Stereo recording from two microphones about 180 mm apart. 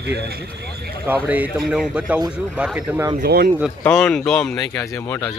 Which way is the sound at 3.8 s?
5° left (ahead or behind).